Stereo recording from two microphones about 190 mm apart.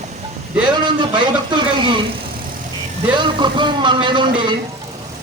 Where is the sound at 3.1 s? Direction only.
25° right (ahead or behind).